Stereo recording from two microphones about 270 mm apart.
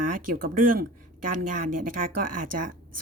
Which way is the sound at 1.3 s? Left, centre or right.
Right.